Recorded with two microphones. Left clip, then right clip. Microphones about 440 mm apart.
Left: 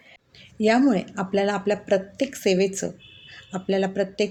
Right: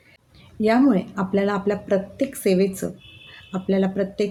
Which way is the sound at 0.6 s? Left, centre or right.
Right.